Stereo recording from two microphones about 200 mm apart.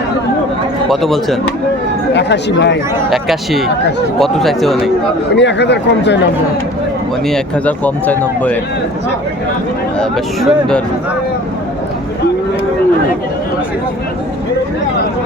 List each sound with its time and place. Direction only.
0.9 s speech: centre (ahead or behind)
2.1 s speech: 60° left (ahead or behind)
3.1 s speech: centre (ahead or behind)
5.4 s speech: 60° left (ahead or behind)
7.3 s speech: 5° left (ahead or behind)
10.0 s speech: 5° left (ahead or behind)